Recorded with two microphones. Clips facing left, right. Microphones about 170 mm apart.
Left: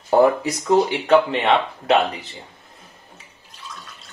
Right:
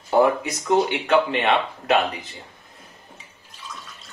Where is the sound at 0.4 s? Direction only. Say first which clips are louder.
Left 3 dB; 30° left (ahead or behind).